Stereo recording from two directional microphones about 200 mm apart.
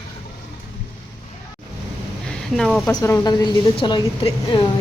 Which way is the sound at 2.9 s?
15° left (ahead or behind).